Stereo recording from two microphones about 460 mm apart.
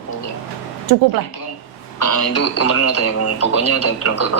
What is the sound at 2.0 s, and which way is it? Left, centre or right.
Speech, left.